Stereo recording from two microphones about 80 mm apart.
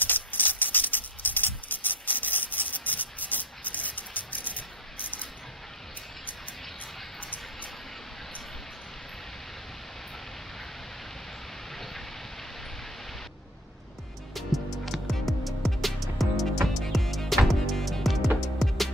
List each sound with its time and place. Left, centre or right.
0.0 s music: left
7.2 s music: centre
11.7 s rain: centre
14.9 s music: centre